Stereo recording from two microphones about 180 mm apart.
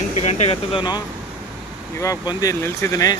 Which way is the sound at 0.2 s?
35° left (ahead or behind).